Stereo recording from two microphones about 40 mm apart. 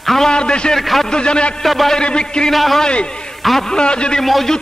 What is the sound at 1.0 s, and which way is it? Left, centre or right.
Speech, left.